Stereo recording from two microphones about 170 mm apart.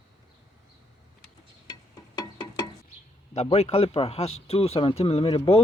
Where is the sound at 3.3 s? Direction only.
35° left (ahead or behind).